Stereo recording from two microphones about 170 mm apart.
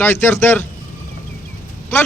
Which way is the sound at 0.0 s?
15° left (ahead or behind).